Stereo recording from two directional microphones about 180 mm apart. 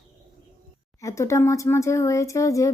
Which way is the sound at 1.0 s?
15° left (ahead or behind).